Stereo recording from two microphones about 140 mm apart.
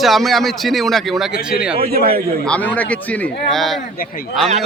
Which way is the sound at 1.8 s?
90° right.